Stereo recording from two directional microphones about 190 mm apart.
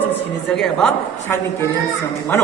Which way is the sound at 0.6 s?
5° left (ahead or behind).